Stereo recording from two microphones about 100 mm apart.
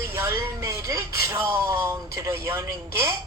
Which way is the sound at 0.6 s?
30° right (ahead or behind).